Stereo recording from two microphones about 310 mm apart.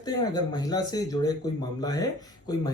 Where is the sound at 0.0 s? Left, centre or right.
Centre.